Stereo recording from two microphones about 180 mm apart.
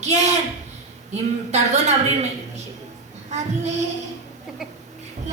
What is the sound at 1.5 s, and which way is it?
Speech, 40° right (ahead or behind).